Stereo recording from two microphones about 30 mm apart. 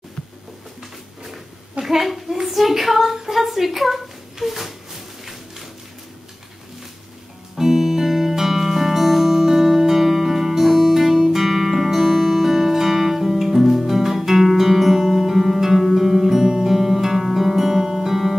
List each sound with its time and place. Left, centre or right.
1.8 s a sound: centre
2.4 s speech: centre
3.3 s a sound: centre
7.5 s music: centre
11.3 s music: centre
15.3 s music: centre
16.7 s guitar: centre